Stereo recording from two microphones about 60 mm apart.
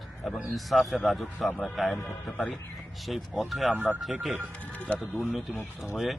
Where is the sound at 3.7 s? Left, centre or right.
Right.